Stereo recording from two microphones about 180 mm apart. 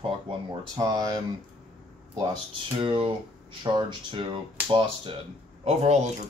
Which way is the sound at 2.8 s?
30° right (ahead or behind).